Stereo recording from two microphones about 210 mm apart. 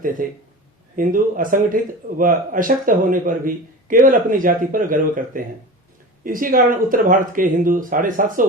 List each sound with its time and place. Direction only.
0.2 s speech: 40° right (ahead or behind)